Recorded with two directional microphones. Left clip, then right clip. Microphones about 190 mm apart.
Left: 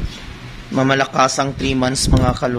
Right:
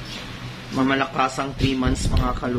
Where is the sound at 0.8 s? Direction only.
60° left (ahead or behind).